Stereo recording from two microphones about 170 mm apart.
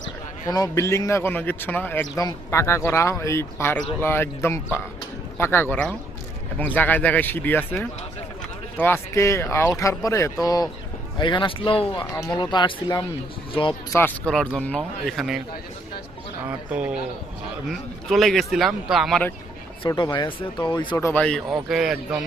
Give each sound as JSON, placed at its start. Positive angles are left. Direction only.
{"t": 0.4, "sound": "speech", "side_deg": 20}
{"t": 13.9, "sound": "speech", "side_deg": 15}
{"t": 16.5, "sound": "speech", "side_deg": -10}
{"t": 19.8, "sound": "speech", "side_deg": 25}
{"t": 20.9, "sound": "speech", "side_deg": 15}
{"t": 21.2, "sound": "speech", "side_deg": 5}